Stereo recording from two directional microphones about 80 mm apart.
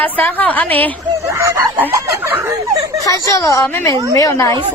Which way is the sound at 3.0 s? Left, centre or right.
Left.